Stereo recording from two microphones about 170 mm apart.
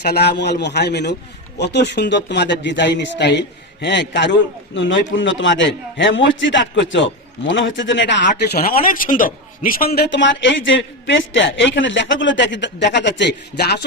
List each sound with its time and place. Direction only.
0.0 s a man's voice: 75° left (ahead or behind); by 8.3 s 90° left
8.4 s a man's voice: 65° left (ahead or behind)